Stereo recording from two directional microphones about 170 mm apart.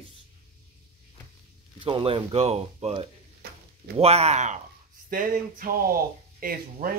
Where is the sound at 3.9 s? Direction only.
35° right (ahead or behind).